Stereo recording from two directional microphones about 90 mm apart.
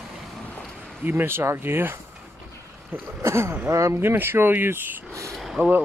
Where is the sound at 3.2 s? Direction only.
30° right (ahead or behind).